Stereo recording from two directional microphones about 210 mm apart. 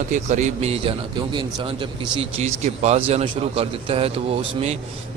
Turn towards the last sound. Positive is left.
turn(degrees=-30)  # may be behind; listen again after turning